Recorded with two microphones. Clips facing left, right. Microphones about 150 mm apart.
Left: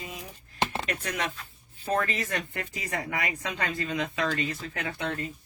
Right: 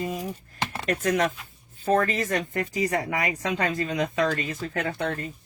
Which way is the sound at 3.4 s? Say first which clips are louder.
Right 5 dB; 40° right (ahead or behind).